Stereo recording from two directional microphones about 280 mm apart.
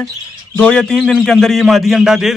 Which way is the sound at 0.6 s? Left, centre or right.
Centre.